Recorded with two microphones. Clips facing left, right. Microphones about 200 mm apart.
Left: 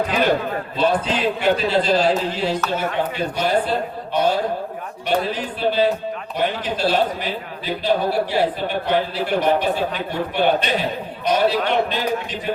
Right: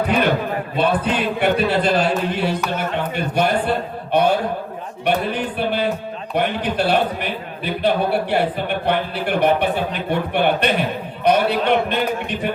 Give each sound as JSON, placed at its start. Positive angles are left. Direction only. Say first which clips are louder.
{"t": 0.8, "sound": "a man's voice", "louder": "even", "side_deg": -60}